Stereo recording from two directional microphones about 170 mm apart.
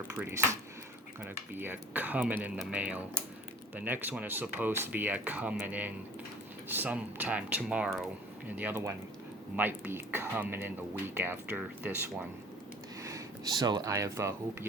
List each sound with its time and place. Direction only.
0.2 s speech: 5° right (ahead or behind)